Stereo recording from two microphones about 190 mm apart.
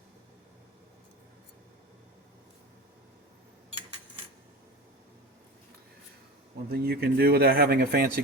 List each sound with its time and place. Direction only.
6.7 s speech: 55° right (ahead or behind)